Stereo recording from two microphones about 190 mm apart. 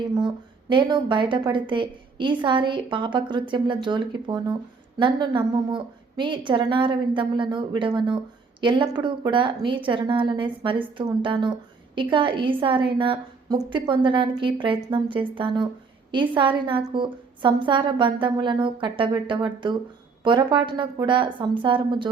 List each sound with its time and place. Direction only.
0.0 s a woman's voice: 25° right (ahead or behind)